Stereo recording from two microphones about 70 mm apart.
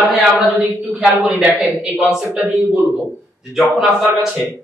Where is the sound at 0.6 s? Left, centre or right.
Right.